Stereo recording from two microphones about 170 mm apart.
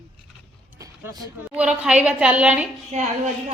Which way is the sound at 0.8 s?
20° right (ahead or behind).